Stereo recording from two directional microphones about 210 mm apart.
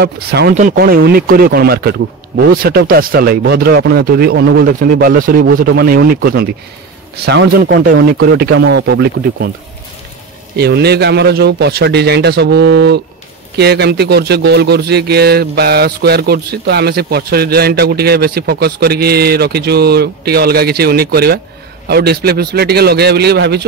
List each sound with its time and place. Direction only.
0.0 s a man's voice: 50° right (ahead or behind)
10.5 s a man's voice: 50° right (ahead or behind)